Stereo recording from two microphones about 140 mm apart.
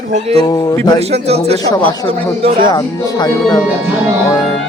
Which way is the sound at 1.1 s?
50° right (ahead or behind).